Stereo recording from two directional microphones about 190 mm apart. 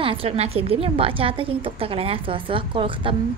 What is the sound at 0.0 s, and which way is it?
A woman's voice, 30° right (ahead or behind).